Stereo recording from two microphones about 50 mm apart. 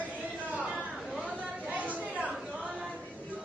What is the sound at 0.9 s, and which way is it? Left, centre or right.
Chatter, centre.